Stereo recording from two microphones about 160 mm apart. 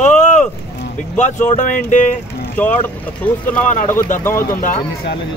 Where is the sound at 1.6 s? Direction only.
50° left (ahead or behind).